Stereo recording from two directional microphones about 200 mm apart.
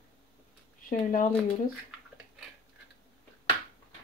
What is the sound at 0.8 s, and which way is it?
Speech, 45° left (ahead or behind).